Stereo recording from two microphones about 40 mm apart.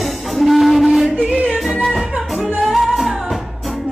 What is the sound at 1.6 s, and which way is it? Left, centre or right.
Music, centre.